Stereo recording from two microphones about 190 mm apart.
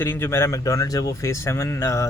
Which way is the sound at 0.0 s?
10° left (ahead or behind).